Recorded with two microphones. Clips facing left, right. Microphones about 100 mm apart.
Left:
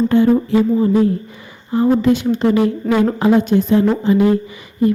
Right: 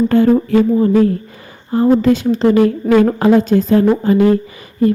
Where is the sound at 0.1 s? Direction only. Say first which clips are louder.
Right 2 dB; 45° right (ahead or behind).